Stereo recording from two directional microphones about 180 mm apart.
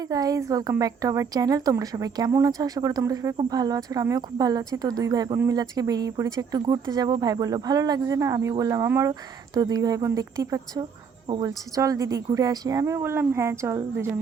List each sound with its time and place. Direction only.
0.1 s a woman's voice: 20° right (ahead or behind)